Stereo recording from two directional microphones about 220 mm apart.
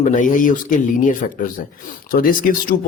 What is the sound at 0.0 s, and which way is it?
Speech, 35° left (ahead or behind).